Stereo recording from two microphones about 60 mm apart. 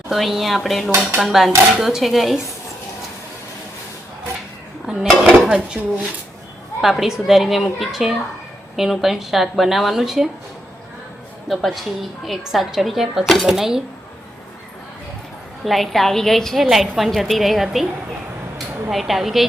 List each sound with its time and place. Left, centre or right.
0.1 s a woman's voice: centre
4.9 s a woman's voice: centre
5.5 s dishes: centre
6.8 s a woman's voice: centre
11.4 s a woman's voice: centre
13.5 s dishes: centre
15.6 s a woman's voice: centre
18.5 s a sound: centre